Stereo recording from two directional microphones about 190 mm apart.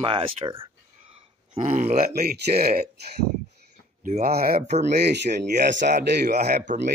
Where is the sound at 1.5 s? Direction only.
40° right (ahead or behind); by 5.9 s 65° right (ahead or behind).